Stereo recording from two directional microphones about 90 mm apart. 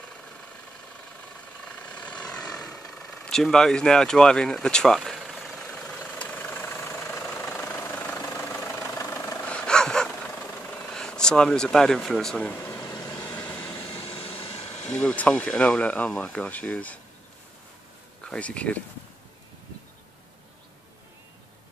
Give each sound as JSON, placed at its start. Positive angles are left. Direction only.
{"t": 1.6, "sound": "vehicle", "side_deg": 15}
{"t": 9.4, "sound": "a sound", "side_deg": 15}
{"t": 10.6, "sound": "speech", "side_deg": 15}
{"t": 12.5, "sound": "speech", "side_deg": 30}
{"t": 13.1, "sound": "vehicle", "side_deg": 20}
{"t": 13.8, "sound": "vehicle", "side_deg": 90}
{"t": 14.9, "sound": "speech", "side_deg": 15}
{"t": 18.2, "sound": "speech", "side_deg": 10}